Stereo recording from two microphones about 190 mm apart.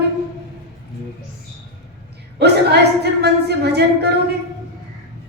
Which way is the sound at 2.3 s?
60° right (ahead or behind).